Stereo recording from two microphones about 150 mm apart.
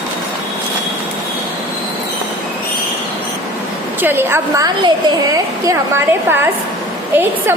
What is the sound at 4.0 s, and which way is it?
Speech, 15° right (ahead or behind).